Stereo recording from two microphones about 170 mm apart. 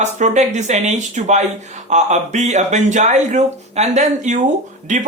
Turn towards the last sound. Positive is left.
turn(degrees=-45)  # may be behind; listen again after turning